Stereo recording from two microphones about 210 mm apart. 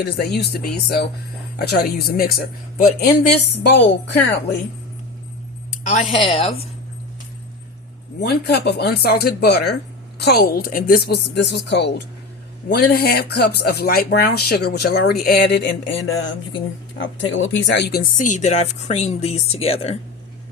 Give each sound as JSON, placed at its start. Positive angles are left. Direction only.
{"t": 0.0, "sound": "speech", "side_deg": 50}
{"t": 5.9, "sound": "speech", "side_deg": 35}
{"t": 6.1, "sound": "speech", "side_deg": 25}
{"t": 8.2, "sound": "speech", "side_deg": 50}